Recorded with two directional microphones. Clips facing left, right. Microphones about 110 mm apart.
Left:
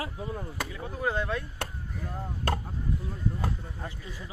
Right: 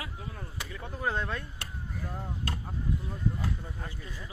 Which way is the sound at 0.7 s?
5° left (ahead or behind).